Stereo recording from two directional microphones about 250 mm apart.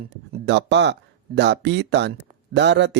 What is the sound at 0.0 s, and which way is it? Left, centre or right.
Speech, right.